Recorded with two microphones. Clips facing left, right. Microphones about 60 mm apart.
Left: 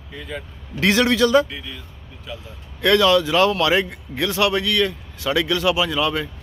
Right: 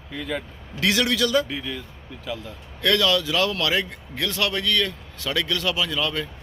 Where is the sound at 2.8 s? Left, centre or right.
Left.